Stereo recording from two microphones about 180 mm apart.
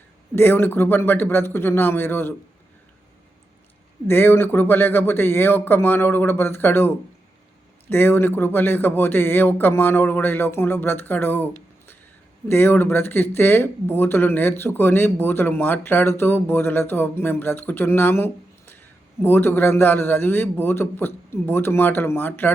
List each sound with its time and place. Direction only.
0.3 s speech: 10° left (ahead or behind)
4.0 s speech: 10° left (ahead or behind)
12.5 s speech: 10° left (ahead or behind)